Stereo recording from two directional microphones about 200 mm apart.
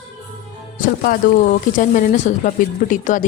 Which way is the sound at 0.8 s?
45° left (ahead or behind).